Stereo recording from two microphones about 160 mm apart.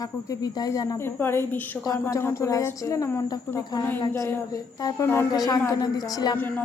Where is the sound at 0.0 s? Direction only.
25° left (ahead or behind).